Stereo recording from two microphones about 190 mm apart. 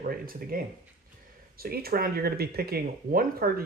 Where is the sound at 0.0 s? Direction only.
50° right (ahead or behind).